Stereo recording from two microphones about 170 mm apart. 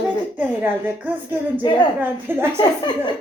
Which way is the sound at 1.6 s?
25° left (ahead or behind).